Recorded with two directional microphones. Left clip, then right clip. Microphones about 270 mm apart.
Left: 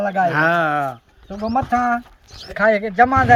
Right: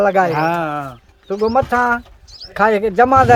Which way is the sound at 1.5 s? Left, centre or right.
Centre.